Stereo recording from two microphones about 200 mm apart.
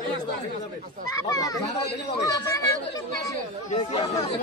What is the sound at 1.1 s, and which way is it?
Speech, 15° left (ahead or behind).